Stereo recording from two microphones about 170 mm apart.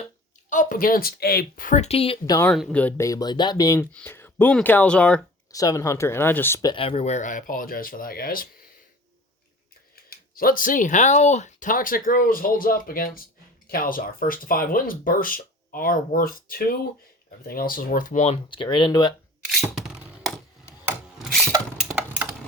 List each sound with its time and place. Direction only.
0.5 s speech: 50° left (ahead or behind); by 2.1 s 35° left (ahead or behind)
2.2 s speech: 20° left (ahead or behind)
2.5 s speech: centre (ahead or behind)
3.0 s speech: 20° left (ahead or behind)
5.5 s speech: 20° left (ahead or behind); by 8.4 s 60° left (ahead or behind)
9.9 s speech: 60° left (ahead or behind)
18.5 s speech: 30° left (ahead or behind)
19.7 s a sound: 5° right (ahead or behind)
21.2 s tools: centre (ahead or behind)
21.8 s a sound: 5° right (ahead or behind)